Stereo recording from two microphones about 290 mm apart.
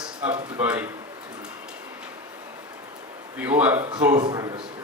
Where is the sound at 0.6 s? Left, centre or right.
Centre.